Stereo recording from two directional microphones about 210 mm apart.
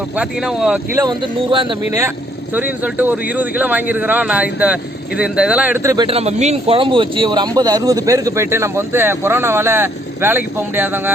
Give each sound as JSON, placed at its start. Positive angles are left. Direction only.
{"t": 0.2, "sound": "speech", "side_deg": -5}
{"t": 0.9, "sound": "a man's voice", "side_deg": -20}
{"t": 6.1, "sound": "a man's voice", "side_deg": -30}